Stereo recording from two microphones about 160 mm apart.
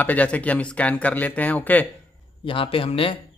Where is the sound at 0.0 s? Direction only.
10° left (ahead or behind).